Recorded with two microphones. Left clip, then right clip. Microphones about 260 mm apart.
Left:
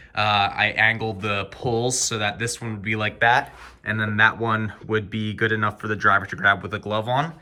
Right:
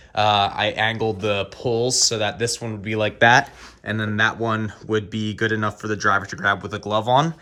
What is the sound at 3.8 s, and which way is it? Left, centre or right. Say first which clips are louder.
Speech: left 2 dB; centre.